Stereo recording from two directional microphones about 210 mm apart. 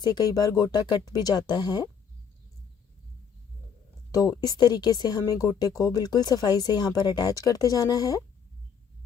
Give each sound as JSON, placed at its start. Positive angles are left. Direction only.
{"t": 0.0, "sound": "speech", "side_deg": 20}
{"t": 4.1, "sound": "speech", "side_deg": 15}